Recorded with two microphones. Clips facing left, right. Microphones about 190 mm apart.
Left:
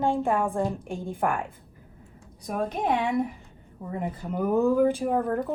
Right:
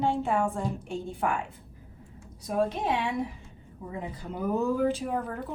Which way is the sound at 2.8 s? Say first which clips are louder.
Left 4 dB; 55° left (ahead or behind).